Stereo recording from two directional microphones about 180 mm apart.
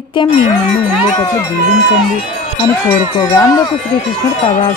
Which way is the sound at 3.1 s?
20° left (ahead or behind).